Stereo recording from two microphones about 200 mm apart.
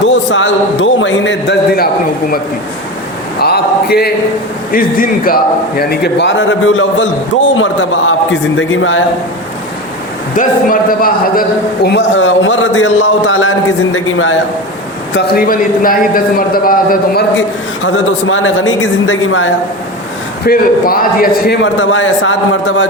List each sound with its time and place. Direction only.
0.0 s a man's voice: 65° left (ahead or behind)
3.4 s a man's voice: 50° left (ahead or behind); by 9.0 s 70° left (ahead or behind)
10.3 s a man's voice: 45° left (ahead or behind); by 14.3 s 80° left
15.1 s a man's voice: 50° left (ahead or behind)
17.8 s a man's voice: 75° left (ahead or behind)
20.5 s a man's voice: 45° left (ahead or behind); by 22.9 s 70° left (ahead or behind)